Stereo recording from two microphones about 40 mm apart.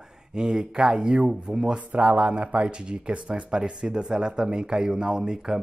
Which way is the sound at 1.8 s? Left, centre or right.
Right.